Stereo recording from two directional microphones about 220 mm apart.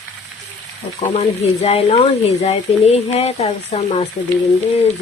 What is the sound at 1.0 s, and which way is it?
Speech, 30° left (ahead or behind).